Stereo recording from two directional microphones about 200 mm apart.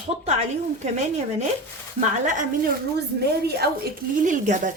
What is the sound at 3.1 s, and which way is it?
Speech, 55° right (ahead or behind).